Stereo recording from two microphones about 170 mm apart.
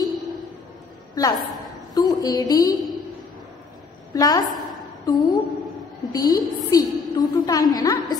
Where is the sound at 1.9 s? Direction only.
20° left (ahead or behind).